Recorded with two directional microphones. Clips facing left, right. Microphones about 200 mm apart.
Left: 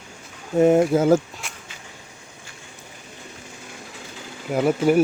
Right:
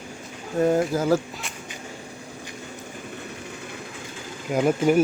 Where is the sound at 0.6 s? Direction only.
25° left (ahead or behind).